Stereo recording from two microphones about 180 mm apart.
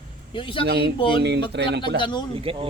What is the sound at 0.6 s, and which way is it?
Speech, 70° right (ahead or behind).